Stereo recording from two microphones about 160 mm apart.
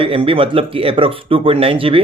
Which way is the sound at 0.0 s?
35° right (ahead or behind).